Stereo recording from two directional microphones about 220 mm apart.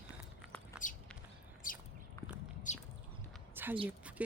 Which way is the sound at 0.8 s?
35° left (ahead or behind).